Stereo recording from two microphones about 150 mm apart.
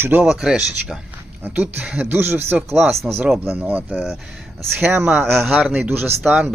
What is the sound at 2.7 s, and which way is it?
Speech, centre (ahead or behind).